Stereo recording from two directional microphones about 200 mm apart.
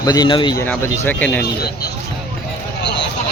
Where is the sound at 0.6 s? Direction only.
10° left (ahead or behind).